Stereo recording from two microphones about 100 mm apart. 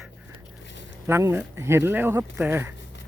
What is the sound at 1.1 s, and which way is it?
Speech, 25° right (ahead or behind).